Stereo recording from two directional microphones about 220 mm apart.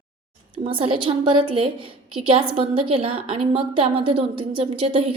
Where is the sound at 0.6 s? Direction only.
25° right (ahead or behind).